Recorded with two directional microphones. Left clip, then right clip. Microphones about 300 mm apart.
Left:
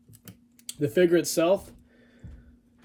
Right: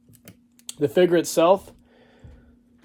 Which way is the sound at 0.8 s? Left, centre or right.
Centre.